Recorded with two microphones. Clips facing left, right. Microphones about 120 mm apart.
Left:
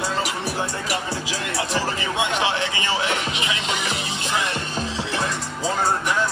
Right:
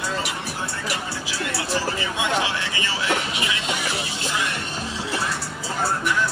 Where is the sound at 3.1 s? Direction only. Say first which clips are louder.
Even; 20° left (ahead or behind).